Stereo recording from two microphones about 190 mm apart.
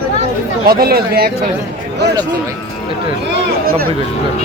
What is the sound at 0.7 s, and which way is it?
Speech, 55° right (ahead or behind).